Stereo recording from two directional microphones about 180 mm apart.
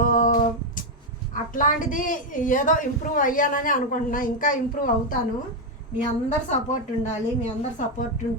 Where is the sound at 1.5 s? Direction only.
50° left (ahead or behind).